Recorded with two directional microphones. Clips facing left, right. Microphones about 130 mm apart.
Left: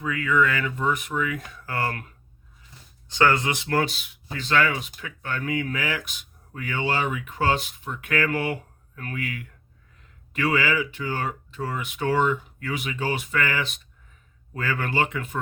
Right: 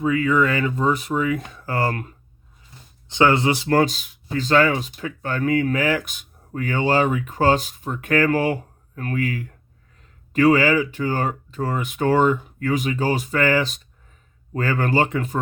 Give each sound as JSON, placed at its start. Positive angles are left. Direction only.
{"t": 0.0, "sound": "speech", "side_deg": -25}
{"t": 3.1, "sound": "speech", "side_deg": -20}